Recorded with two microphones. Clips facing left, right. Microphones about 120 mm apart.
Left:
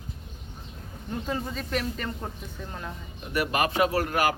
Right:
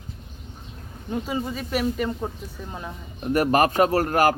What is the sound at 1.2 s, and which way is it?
A woman's voice, 10° right (ahead or behind).